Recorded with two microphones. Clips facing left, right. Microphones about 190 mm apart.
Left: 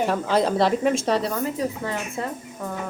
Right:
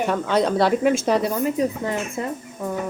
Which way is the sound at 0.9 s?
30° left (ahead or behind).